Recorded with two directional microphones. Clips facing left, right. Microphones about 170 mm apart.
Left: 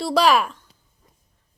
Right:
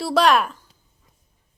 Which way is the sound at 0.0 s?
Centre (ahead or behind).